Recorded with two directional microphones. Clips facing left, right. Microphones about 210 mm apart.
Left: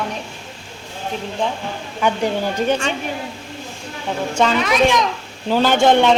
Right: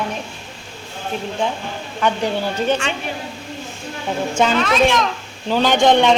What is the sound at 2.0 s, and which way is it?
Speech, 10° left (ahead or behind).